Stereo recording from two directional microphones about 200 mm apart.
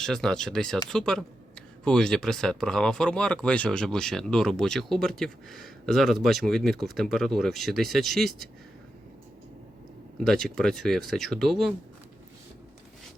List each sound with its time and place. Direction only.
0.0 s speech: 5° left (ahead or behind)
10.2 s speech: centre (ahead or behind)